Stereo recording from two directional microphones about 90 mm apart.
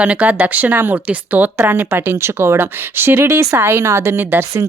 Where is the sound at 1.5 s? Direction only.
25° right (ahead or behind).